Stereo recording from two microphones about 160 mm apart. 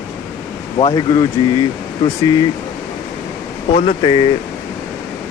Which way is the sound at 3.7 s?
40° left (ahead or behind).